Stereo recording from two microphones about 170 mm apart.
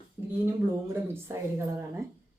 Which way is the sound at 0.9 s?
15° right (ahead or behind).